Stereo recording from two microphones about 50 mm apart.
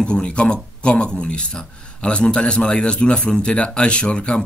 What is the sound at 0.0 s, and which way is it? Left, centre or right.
Speech, left.